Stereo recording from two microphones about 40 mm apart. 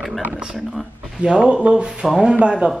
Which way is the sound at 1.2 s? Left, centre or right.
Right.